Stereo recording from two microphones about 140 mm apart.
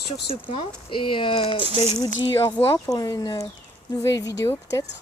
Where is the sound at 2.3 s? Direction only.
20° left (ahead or behind).